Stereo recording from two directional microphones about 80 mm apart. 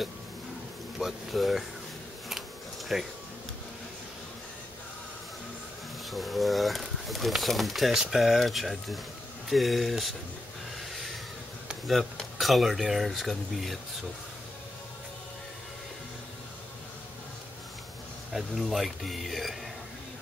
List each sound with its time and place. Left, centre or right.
0.9 s speech: centre
2.9 s speech: centre
6.0 s speech: centre
10.8 s a sound: centre
11.9 s speech: centre
18.3 s speech: centre